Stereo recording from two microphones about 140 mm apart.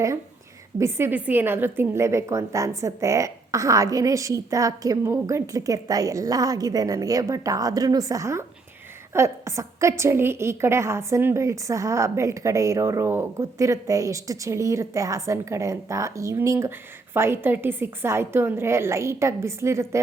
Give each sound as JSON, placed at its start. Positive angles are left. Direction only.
{"t": 0.8, "sound": "a woman's voice", "side_deg": -20}